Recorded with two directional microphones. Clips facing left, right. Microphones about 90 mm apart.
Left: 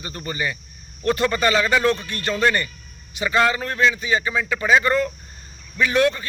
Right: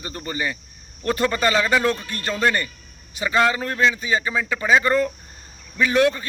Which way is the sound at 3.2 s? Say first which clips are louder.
Even; 20° right (ahead or behind).